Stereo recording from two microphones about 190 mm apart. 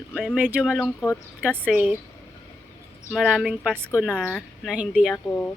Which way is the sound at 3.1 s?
Centre (ahead or behind).